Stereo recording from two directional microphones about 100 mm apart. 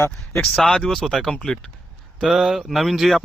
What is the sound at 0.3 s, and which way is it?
Speech, 5° left (ahead or behind).